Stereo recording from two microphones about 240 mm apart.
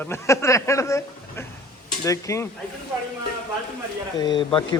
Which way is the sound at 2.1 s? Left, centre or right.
Centre.